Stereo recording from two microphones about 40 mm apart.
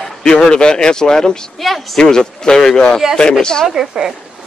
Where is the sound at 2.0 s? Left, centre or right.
Centre.